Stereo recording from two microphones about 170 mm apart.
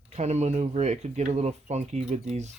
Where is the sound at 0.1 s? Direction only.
40° right (ahead or behind).